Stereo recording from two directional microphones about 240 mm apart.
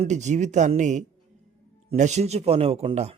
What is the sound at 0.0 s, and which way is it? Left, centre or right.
A man's voice, right.